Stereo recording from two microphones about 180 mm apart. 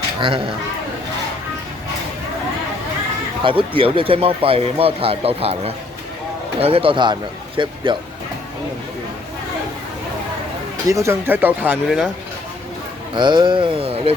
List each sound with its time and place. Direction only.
0.2 s a man's voice: 30° right (ahead or behind)
3.4 s a man's voice: 30° right (ahead or behind)
10.8 s speech: 15° right (ahead or behind)
13.1 s a man's voice: 25° right (ahead or behind)